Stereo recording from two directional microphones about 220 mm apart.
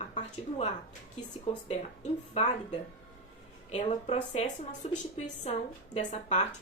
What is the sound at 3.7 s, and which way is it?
A woman's voice, 30° left (ahead or behind).